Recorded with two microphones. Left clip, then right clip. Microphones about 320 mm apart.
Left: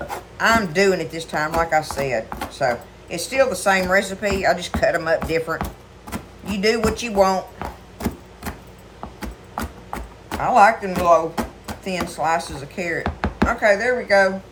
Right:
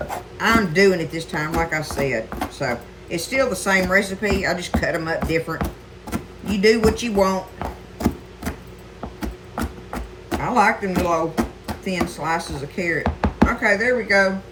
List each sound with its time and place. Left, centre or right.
0.3 s a man's voice: centre
7.6 s chopping: centre
9.2 s a sound: centre
12.5 s a man's voice: centre
13.0 s chopping: centre
13.5 s a man's voice: centre